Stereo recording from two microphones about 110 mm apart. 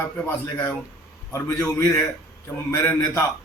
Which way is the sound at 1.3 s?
25° left (ahead or behind).